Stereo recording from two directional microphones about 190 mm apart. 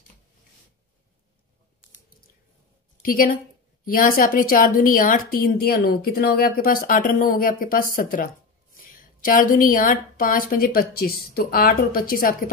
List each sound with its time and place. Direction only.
3.0 s a woman's voice: 50° left (ahead or behind)